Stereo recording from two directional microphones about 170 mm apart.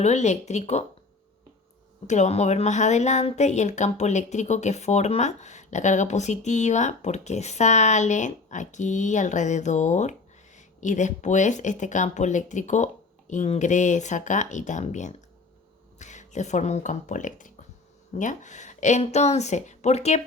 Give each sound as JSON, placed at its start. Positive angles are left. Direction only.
{"t": 0.0, "sound": "speech", "side_deg": 40}
{"t": 2.0, "sound": "a woman's voice", "side_deg": 40}